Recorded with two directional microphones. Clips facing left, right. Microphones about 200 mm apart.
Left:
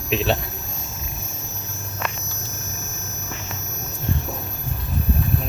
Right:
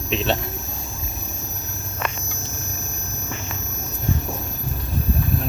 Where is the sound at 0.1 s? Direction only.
Centre (ahead or behind).